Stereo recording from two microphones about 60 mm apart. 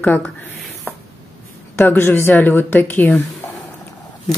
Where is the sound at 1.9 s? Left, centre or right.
Left.